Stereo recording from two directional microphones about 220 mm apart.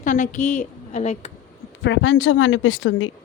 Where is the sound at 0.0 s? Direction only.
35° left (ahead or behind).